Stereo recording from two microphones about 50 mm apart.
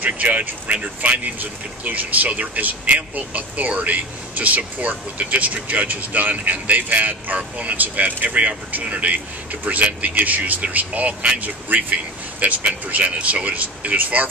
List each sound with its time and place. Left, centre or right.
0.0 s speech: right